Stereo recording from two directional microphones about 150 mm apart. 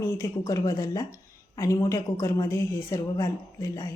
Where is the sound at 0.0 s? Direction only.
20° left (ahead or behind).